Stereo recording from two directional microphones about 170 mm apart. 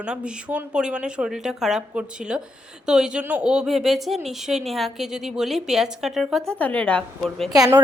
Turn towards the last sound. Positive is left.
turn(degrees=5)  # may be behind; listen again after turning